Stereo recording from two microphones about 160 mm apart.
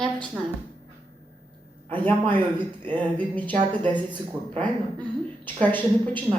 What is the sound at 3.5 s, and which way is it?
Speech, 30° right (ahead or behind).